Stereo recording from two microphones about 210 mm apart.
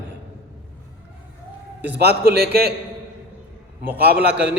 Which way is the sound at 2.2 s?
45° right (ahead or behind).